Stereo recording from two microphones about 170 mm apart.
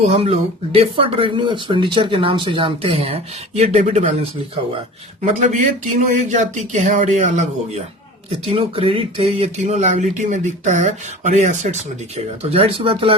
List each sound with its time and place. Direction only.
0.0 s speech: 35° right (ahead or behind)
5.2 s speech: 45° right (ahead or behind)
8.4 s speech: 30° right (ahead or behind)